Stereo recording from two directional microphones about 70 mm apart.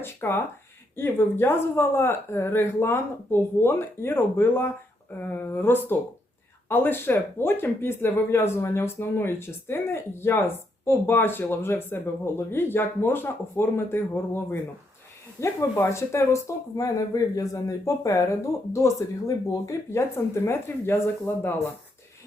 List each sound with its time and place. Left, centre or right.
0.0 s speech: left